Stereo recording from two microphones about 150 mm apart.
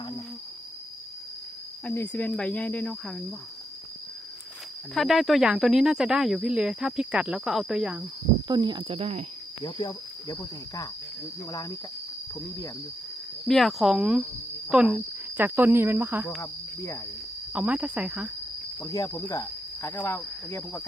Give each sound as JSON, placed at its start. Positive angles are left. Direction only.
{"t": 1.8, "sound": "cricket", "side_deg": 10}
{"t": 4.9, "sound": "speech", "side_deg": 0}
{"t": 8.4, "sound": "speech", "side_deg": -30}
{"t": 9.6, "sound": "speech", "side_deg": 30}
{"t": 12.3, "sound": "speech", "side_deg": 20}
{"t": 13.5, "sound": "speech", "side_deg": 0}
{"t": 16.4, "sound": "speech", "side_deg": 20}
{"t": 17.5, "sound": "speech", "side_deg": -10}
{"t": 18.8, "sound": "speech", "side_deg": 20}
{"t": 19.3, "sound": "cricket", "side_deg": 20}